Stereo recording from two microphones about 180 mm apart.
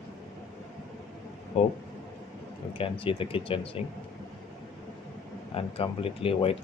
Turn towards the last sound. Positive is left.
turn(degrees=30)  # may be behind; listen again after turning